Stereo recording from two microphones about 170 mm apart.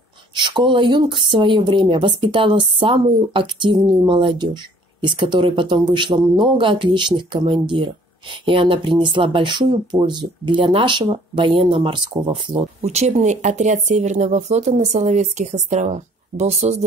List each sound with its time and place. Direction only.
0.3 s speech: 25° right (ahead or behind)
12.8 s speech: 40° right (ahead or behind)